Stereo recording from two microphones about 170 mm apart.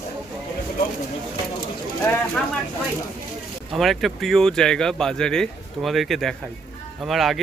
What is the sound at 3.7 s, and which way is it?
Speech, centre (ahead or behind).